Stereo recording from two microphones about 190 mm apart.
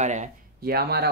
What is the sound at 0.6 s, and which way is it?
Speech, 55° right (ahead or behind).